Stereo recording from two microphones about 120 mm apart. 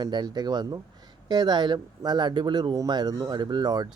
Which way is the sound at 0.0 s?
35° right (ahead or behind).